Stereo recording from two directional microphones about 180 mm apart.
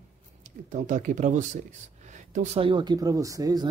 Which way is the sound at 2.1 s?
45° right (ahead or behind).